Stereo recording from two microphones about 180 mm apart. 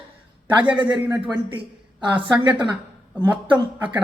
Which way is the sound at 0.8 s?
10° right (ahead or behind).